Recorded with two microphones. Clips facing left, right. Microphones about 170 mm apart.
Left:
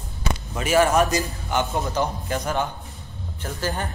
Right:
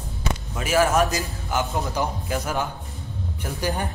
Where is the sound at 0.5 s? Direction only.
Centre (ahead or behind).